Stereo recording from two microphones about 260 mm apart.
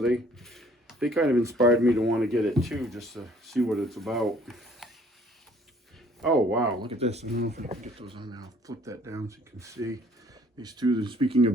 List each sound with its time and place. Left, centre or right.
0.0 s speech: centre
6.2 s speech: centre
6.8 s speech: right